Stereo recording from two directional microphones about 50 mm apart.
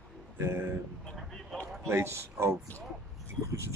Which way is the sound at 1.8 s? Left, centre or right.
Right.